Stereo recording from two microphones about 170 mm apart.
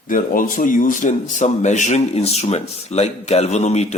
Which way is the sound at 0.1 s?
55° left (ahead or behind).